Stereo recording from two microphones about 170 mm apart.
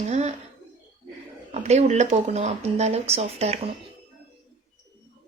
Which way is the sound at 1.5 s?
40° right (ahead or behind).